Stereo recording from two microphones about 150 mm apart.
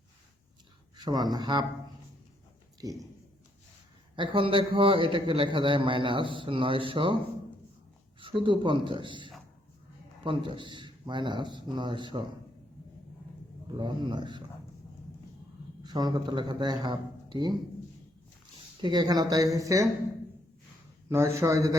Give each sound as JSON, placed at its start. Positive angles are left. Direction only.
{"t": 0.9, "sound": "speech", "side_deg": -25}
{"t": 2.8, "sound": "speech", "side_deg": -25}
{"t": 4.1, "sound": "a man's voice", "side_deg": -35}
{"t": 8.2, "sound": "a man's voice", "side_deg": -35}
{"t": 13.7, "sound": "a man's voice", "side_deg": -30}
{"t": 15.8, "sound": "a man's voice", "side_deg": -25}
{"t": 18.8, "sound": "speech", "side_deg": -30}
{"t": 21.1, "sound": "speech", "side_deg": -20}